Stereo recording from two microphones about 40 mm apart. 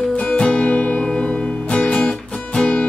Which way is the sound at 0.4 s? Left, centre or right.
Left.